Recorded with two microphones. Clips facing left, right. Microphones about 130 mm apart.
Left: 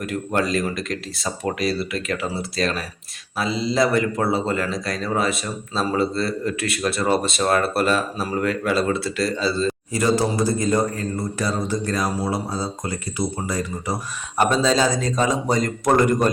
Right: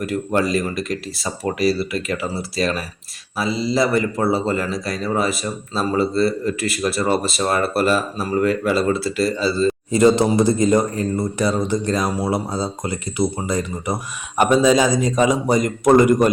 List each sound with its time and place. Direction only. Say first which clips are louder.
0.0 s speech: right 3 dB; centre (ahead or behind)
9.9 s a man's voice: right 6 dB; 25° right (ahead or behind)